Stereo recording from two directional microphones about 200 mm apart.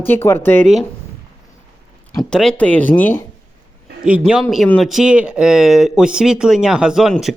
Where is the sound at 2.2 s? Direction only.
Centre (ahead or behind).